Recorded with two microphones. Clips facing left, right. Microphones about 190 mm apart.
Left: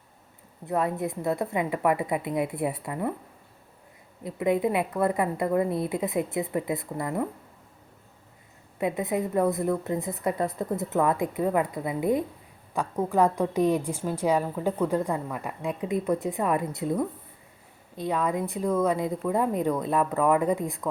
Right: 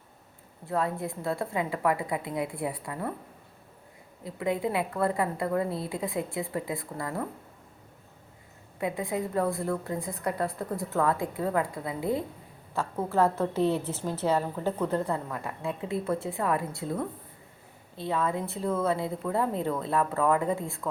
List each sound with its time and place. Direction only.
0.6 s a woman's voice: 20° left (ahead or behind)
4.2 s a woman's voice: 20° left (ahead or behind)
8.8 s a woman's voice: 20° left (ahead or behind)